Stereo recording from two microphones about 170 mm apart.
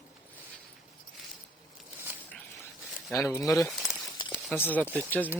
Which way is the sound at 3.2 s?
15° left (ahead or behind).